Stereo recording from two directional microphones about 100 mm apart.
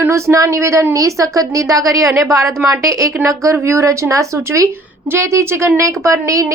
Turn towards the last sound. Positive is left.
turn(degrees=-30)  # may be behind; listen again after turning